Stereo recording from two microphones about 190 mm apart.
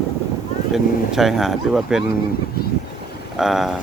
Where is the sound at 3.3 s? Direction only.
Centre (ahead or behind).